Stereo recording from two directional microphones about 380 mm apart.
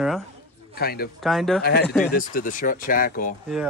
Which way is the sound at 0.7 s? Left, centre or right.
Left.